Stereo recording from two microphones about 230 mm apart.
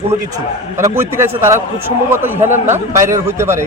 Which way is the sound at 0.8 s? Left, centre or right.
Centre.